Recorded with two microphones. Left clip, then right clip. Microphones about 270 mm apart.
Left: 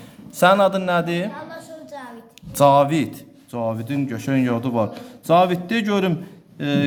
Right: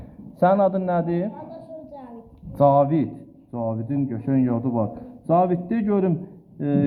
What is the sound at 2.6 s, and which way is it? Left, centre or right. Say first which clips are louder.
A man's voice: left 3 dB; left.